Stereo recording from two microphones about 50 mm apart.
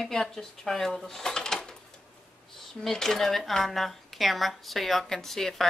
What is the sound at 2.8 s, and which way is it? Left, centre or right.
Speech, centre.